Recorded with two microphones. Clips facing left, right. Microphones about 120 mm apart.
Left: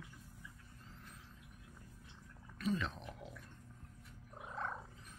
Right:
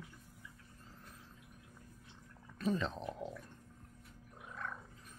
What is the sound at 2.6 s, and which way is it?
Speech, 35° right (ahead or behind).